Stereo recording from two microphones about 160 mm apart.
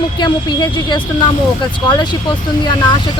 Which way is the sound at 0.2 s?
30° left (ahead or behind).